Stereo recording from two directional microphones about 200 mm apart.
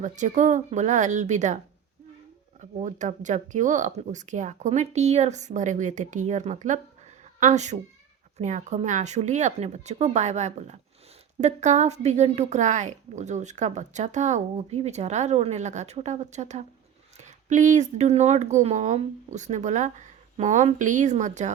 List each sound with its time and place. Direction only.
0.0 s a woman's voice: 40° right (ahead or behind)
2.6 s a woman's voice: 40° right (ahead or behind)